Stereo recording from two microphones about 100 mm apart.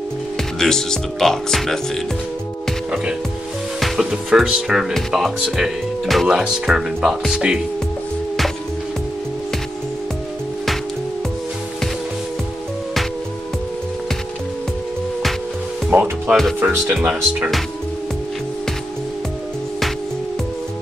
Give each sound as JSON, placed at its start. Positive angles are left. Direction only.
{"t": 0.6, "sound": "speech", "side_deg": 5}
{"t": 3.8, "sound": "speech", "side_deg": -5}
{"t": 15.9, "sound": "music", "side_deg": -10}
{"t": 16.6, "sound": "speech", "side_deg": -15}